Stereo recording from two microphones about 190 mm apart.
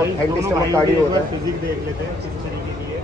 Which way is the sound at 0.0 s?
15° right (ahead or behind).